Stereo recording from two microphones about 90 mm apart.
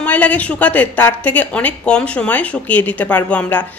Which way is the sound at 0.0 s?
20° left (ahead or behind).